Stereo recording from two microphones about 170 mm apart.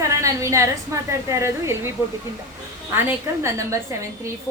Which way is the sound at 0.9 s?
15° right (ahead or behind).